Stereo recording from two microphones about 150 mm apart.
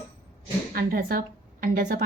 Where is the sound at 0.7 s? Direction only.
80° right.